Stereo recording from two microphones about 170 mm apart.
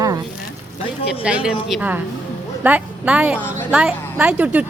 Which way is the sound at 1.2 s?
5° right (ahead or behind).